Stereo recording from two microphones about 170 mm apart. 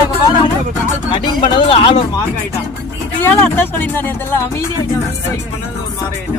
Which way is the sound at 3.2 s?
10° left (ahead or behind).